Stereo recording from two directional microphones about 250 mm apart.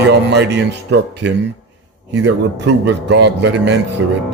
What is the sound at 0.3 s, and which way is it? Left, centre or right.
Speech, right.